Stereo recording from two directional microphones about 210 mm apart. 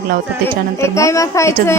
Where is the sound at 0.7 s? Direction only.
15° left (ahead or behind).